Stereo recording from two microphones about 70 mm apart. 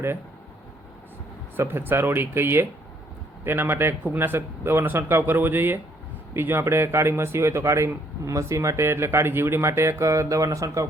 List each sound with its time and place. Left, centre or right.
1.5 s speech: right